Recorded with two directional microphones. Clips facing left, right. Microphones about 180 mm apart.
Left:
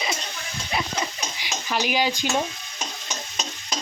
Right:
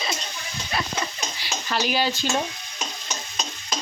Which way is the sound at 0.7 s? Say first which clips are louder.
Left 1 dB; 20° left (ahead or behind).